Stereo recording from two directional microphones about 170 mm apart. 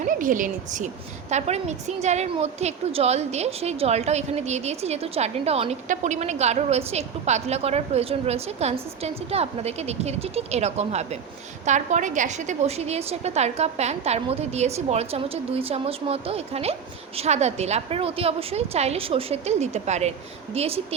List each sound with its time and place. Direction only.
0.0 s a woman's voice: 50° right (ahead or behind)